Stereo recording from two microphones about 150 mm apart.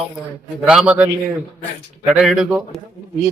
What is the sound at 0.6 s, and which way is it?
A man's voice, 5° right (ahead or behind).